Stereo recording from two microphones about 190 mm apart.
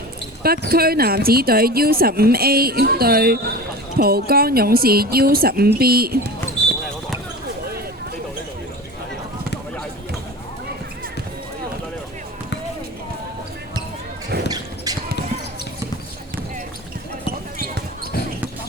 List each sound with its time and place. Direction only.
0.4 s speech: 50° right (ahead or behind)
14.9 s basketball bounce: 20° right (ahead or behind)